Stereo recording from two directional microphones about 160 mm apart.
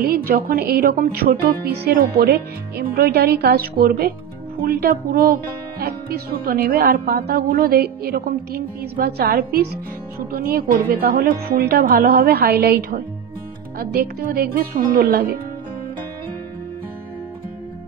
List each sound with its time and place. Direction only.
0.0 s speech: 70° right (ahead or behind)